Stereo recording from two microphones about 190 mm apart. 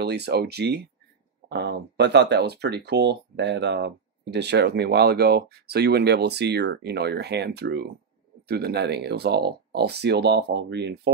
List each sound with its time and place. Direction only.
0.0 s speech: 60° right (ahead or behind)